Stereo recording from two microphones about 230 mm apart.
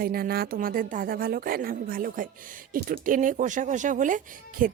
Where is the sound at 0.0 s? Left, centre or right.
Right.